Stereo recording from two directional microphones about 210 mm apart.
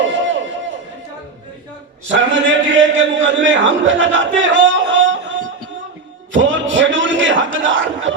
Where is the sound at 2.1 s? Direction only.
60° right (ahead or behind).